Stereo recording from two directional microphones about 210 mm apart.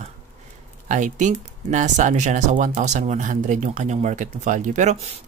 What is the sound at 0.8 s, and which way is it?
Speech, 35° right (ahead or behind).